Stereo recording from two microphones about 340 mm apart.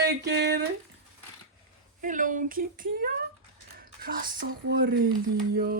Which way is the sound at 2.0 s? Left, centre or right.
Right.